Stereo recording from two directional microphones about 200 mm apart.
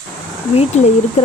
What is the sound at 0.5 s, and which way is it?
Speech, 30° left (ahead or behind).